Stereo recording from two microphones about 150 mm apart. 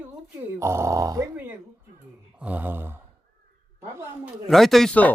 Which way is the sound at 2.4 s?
10° right (ahead or behind).